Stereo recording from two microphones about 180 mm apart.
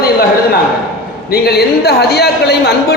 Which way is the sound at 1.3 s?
60° left (ahead or behind).